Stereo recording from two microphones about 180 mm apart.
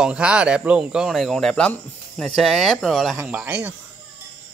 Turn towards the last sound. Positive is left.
turn(degrees=-10)  # may be behind; listen again after turning